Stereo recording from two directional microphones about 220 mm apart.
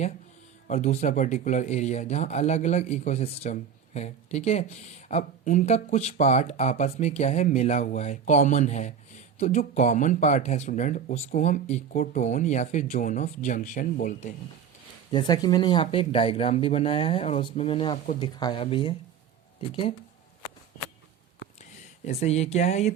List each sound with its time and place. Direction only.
0.7 s speech: 30° left (ahead or behind)
15.1 s speech: 20° left (ahead or behind)
22.0 s speech: 30° left (ahead or behind)